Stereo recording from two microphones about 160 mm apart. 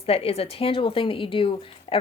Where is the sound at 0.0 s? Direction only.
35° left (ahead or behind).